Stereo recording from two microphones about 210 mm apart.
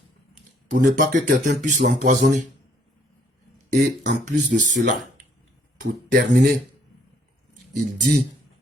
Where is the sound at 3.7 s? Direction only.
35° right (ahead or behind).